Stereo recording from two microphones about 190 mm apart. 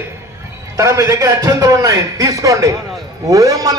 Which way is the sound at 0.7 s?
15° right (ahead or behind).